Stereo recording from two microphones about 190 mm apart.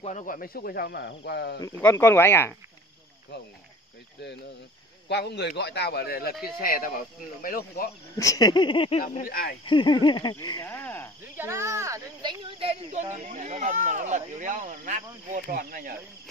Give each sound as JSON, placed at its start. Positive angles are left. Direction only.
{"t": 0.0, "sound": "speech", "side_deg": 40}
{"t": 1.6, "sound": "speech", "side_deg": 10}
{"t": 5.0, "sound": "speech", "side_deg": 65}
{"t": 8.2, "sound": "speech", "side_deg": 20}
{"t": 9.2, "sound": "speech", "side_deg": 50}
{"t": 9.7, "sound": "speech", "side_deg": 25}
{"t": 11.3, "sound": "speech", "side_deg": -15}